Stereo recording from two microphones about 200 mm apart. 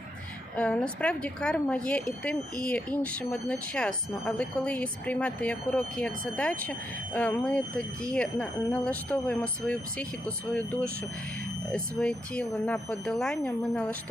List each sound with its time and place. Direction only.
0.5 s speech: 5° left (ahead or behind)